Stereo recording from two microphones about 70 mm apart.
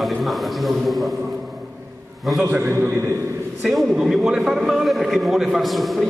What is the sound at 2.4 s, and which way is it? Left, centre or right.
Speech, right.